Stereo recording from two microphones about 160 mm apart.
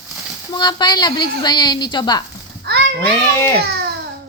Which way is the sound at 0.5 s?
25° left (ahead or behind).